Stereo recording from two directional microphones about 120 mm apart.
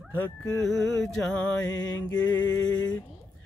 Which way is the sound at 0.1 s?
15° left (ahead or behind).